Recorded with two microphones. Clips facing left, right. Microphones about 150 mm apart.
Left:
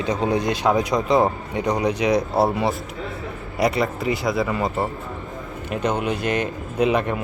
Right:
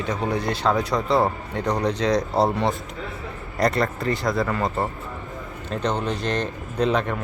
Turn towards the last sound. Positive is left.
turn(degrees=10)  # may be behind; listen again after turning